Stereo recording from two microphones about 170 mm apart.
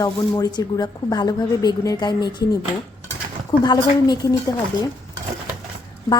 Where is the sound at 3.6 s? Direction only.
25° left (ahead or behind).